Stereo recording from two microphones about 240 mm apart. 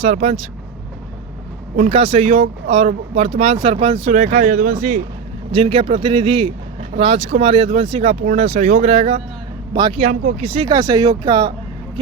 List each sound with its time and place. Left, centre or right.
0.0 s speech: right
1.7 s speech: right